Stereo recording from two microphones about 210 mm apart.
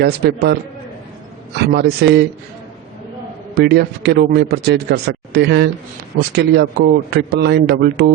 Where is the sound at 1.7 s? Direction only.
50° right (ahead or behind).